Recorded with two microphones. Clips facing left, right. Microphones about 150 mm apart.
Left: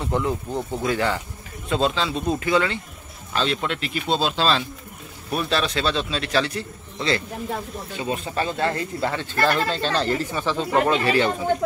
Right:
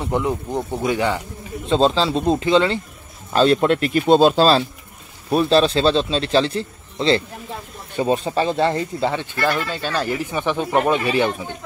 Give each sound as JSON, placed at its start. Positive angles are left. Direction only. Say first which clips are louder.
{"t": 0.0, "sound": "speech", "louder": "right 2 dB", "side_deg": -15}
{"t": 1.7, "sound": "speech", "louder": "right 6 dB", "side_deg": -30}
{"t": 3.3, "sound": "a man's voice", "louder": "right 9 dB", "side_deg": -45}